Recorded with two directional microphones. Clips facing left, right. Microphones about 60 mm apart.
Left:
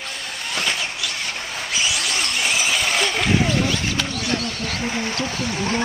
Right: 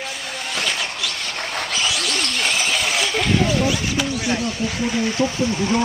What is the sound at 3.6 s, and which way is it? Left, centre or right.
Speech, centre.